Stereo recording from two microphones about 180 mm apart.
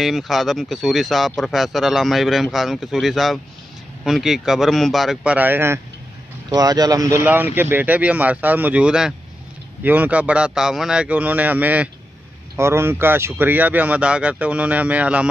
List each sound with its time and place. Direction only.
0.0 s speech: centre (ahead or behind)